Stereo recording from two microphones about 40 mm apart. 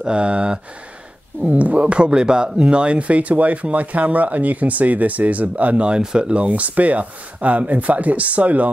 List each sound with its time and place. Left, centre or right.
0.0 s speech: right
1.4 s speech: right
5.9 s speech: right
6.4 s speech: right